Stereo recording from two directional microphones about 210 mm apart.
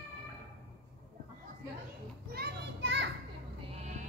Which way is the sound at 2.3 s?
50° right (ahead or behind).